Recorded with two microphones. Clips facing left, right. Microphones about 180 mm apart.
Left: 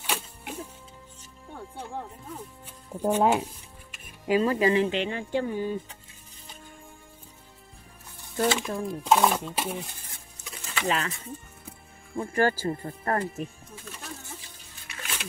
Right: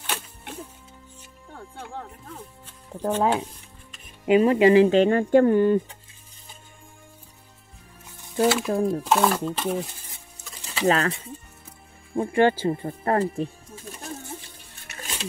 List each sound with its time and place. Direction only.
0.0 s music: 5° left (ahead or behind)
1.5 s speech: 10° left (ahead or behind)
4.3 s speech: 25° right (ahead or behind); by 5.8 s 60° right (ahead or behind)
8.4 s speech: 5° right (ahead or behind)
10.7 s speech: 35° right (ahead or behind)
12.2 s speech: 25° right (ahead or behind)
14.2 s a sound: 55° right (ahead or behind)
15.0 s a sound: 35° right (ahead or behind)